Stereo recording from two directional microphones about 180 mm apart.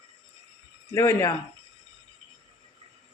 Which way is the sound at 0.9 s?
15° left (ahead or behind).